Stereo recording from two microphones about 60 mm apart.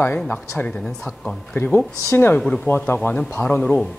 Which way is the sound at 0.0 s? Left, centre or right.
Left.